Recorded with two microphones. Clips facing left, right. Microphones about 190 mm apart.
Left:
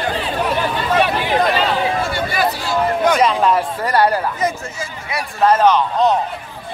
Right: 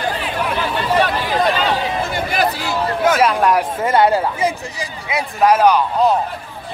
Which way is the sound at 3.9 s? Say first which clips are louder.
Right 2 dB; 20° right (ahead or behind).